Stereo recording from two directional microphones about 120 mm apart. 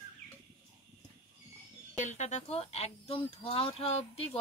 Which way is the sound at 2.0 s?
80° left.